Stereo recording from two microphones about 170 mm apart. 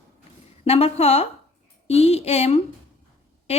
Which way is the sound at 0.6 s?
35° left (ahead or behind).